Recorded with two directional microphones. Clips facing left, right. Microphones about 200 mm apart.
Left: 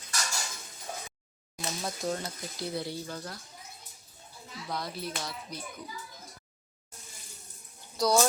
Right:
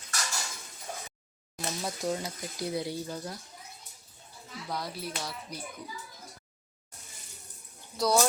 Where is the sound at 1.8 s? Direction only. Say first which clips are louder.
Right 1 dB; 10° right (ahead or behind).